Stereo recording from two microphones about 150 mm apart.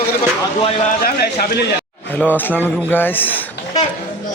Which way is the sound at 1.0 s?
90° left.